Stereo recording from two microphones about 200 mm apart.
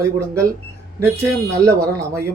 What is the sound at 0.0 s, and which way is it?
Speech, 15° right (ahead or behind).